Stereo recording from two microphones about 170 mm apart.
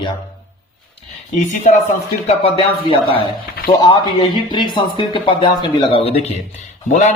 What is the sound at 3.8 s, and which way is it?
A man's voice, 25° left (ahead or behind).